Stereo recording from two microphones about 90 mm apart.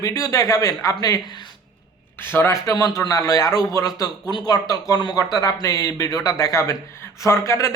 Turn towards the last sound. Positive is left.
turn(degrees=35)  # may be behind; listen again after turning